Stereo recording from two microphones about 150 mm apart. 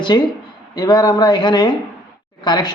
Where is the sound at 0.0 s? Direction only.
30° left (ahead or behind).